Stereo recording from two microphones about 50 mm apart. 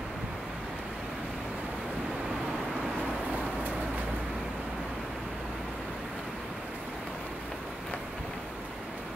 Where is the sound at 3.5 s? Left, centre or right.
Right.